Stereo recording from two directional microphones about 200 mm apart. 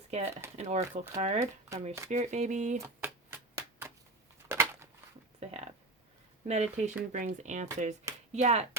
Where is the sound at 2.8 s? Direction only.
10° right (ahead or behind).